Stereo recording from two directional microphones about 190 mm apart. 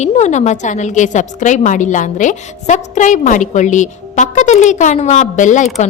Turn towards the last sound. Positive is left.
turn(degrees=40)  # may be behind; listen again after turning